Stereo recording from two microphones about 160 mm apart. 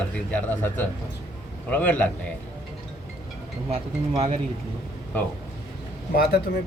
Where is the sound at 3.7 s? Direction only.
40° right (ahead or behind).